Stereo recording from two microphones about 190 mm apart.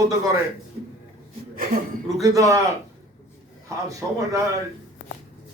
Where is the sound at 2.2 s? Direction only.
15° right (ahead or behind).